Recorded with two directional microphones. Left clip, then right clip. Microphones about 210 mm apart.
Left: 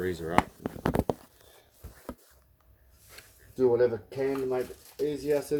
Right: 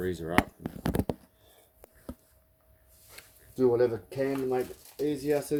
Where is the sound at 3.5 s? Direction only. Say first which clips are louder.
Left 1 dB; 50° right (ahead or behind).